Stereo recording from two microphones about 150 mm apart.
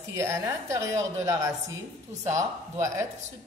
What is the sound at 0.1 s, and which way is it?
A woman's voice, 20° right (ahead or behind).